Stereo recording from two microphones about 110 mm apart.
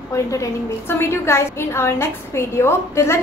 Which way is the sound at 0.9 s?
20° left (ahead or behind).